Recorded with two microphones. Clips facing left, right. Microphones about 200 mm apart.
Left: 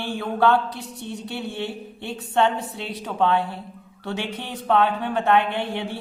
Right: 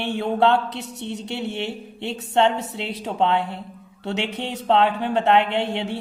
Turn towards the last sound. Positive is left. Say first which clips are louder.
# right 3 dB
turn(degrees=-25)  # may be behind; listen again after turning